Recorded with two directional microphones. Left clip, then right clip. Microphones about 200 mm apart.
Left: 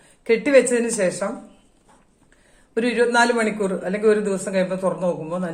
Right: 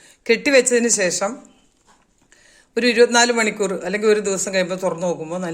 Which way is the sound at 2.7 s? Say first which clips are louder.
Right 4 dB; 50° right (ahead or behind).